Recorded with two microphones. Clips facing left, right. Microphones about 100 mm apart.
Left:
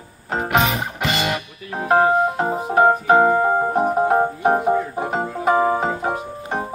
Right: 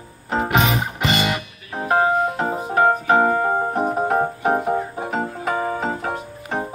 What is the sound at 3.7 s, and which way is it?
Music, 10° left (ahead or behind).